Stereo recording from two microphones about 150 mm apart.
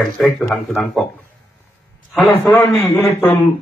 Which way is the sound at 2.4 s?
15° left (ahead or behind).